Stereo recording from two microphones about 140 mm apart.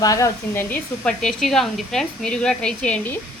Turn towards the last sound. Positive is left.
turn(degrees=10)  # may be behind; listen again after turning